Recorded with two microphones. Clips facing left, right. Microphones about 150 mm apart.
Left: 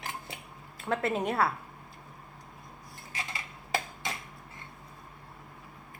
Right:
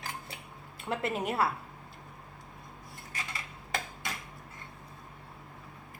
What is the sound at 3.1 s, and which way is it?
Cutlery, 25° left (ahead or behind).